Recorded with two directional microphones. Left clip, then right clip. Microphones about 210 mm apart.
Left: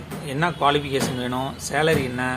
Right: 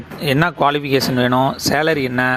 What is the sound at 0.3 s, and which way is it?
Speech, 40° right (ahead or behind).